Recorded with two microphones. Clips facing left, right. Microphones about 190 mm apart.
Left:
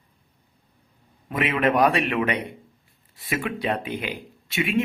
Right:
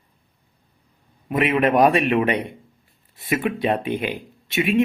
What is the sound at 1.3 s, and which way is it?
Speech, 25° right (ahead or behind).